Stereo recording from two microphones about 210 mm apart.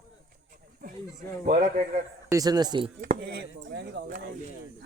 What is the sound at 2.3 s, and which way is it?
Speech, 15° right (ahead or behind).